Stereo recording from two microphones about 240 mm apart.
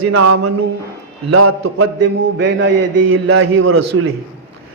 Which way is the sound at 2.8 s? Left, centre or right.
Right.